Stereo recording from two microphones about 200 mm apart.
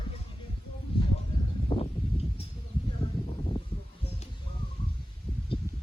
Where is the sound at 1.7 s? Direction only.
25° left (ahead or behind).